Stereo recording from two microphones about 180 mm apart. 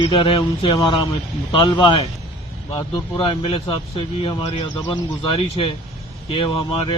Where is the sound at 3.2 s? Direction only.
30° left (ahead or behind).